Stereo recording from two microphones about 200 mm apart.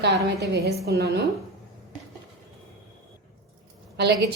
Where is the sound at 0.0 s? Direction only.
55° right (ahead or behind).